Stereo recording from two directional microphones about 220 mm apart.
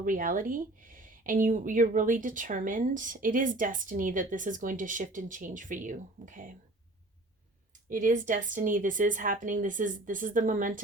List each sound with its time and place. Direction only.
0.0 s speech: 40° right (ahead or behind)
7.9 s speech: 35° right (ahead or behind)